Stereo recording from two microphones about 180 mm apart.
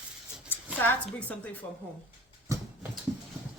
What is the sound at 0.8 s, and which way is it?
Speech, 10° left (ahead or behind).